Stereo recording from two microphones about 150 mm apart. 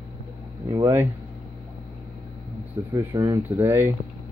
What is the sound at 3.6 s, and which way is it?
Speech, 15° right (ahead or behind).